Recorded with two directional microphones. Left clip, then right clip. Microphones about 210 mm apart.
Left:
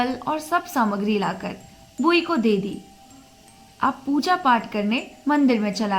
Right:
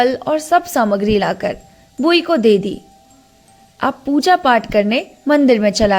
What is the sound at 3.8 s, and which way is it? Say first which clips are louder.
A woman's voice: right 6 dB; 40° right (ahead or behind).